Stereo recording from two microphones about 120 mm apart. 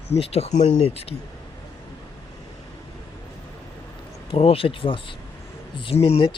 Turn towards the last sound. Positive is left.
turn(degrees=50)  # may be behind; listen again after turning